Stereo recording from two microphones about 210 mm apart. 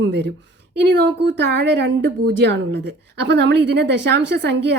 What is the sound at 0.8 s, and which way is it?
A woman's voice, 55° right (ahead or behind).